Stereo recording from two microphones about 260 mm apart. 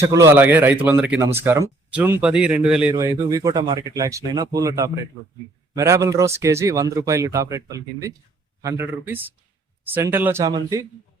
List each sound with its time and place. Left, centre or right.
0.0 s speech: centre